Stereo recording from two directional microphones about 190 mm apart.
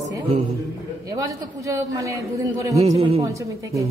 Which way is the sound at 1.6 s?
15° right (ahead or behind).